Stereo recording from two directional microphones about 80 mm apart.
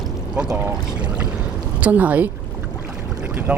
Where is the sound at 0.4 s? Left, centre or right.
Centre.